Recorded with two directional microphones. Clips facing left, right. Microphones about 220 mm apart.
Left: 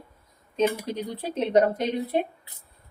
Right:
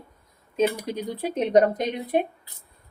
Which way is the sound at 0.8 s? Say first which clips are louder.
Right 2 dB; 10° right (ahead or behind).